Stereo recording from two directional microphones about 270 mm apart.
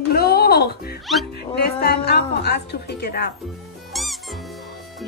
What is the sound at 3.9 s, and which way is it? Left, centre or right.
Music, centre.